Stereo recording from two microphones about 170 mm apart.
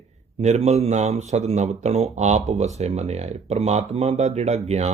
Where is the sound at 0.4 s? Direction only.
40° right (ahead or behind).